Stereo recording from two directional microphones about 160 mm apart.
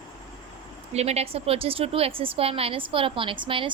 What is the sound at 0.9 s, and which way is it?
A woman's voice, 40° right (ahead or behind).